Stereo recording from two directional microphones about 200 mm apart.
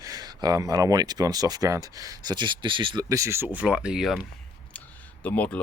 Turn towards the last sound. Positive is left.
turn(degrees=10)  # may be behind; listen again after turning